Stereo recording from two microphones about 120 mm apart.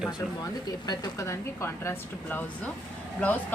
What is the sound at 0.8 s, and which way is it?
Speech, 35° left (ahead or behind).